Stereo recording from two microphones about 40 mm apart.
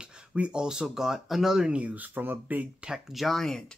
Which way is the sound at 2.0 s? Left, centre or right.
Right.